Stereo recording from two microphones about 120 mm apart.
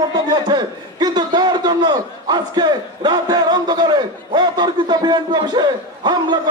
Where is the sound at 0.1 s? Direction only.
35° right (ahead or behind).